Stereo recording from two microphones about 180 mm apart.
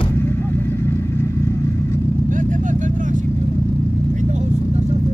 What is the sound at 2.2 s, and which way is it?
Vehicle, 45° right (ahead or behind).